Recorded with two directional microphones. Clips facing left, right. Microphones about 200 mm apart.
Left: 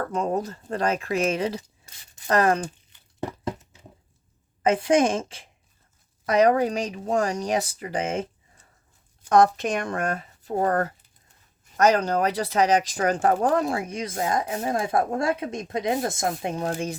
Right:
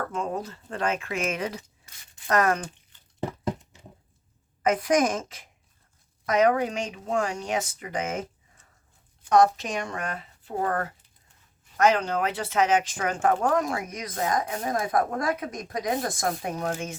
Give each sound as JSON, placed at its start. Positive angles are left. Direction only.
{"t": 0.1, "sound": "speech", "side_deg": 40}
{"t": 4.6, "sound": "speech", "side_deg": 30}
{"t": 9.3, "sound": "speech", "side_deg": 55}